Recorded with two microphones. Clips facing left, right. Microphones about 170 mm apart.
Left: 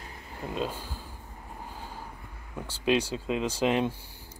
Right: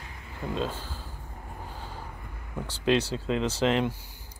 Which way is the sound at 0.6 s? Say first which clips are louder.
Even; 10° left (ahead or behind).